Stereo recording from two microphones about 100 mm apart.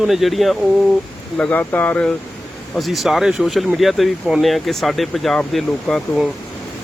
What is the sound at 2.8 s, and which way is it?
Speech, centre (ahead or behind).